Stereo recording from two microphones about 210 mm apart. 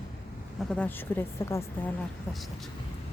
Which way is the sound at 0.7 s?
5° left (ahead or behind).